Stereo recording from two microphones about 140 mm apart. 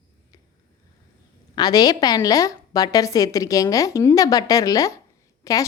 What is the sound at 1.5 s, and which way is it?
A woman's voice, 25° left (ahead or behind).